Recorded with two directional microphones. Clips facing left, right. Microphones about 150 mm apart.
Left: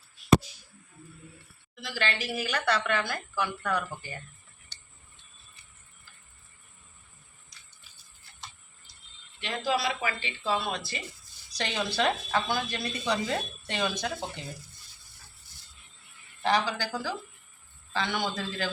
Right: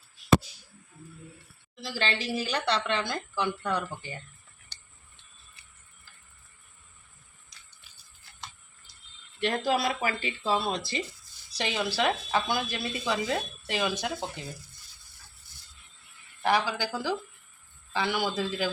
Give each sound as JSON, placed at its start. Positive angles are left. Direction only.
{"t": 1.8, "sound": "a woman's voice", "side_deg": -30}
{"t": 9.6, "sound": "speech", "side_deg": -40}
{"t": 11.5, "sound": "speech", "side_deg": -10}
{"t": 16.4, "sound": "speech", "side_deg": -10}